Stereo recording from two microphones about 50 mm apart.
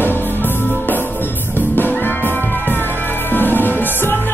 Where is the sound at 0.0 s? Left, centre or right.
Left.